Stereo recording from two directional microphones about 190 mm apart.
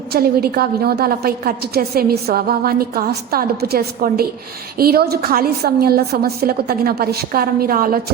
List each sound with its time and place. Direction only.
0.1 s a woman's voice: 55° right (ahead or behind)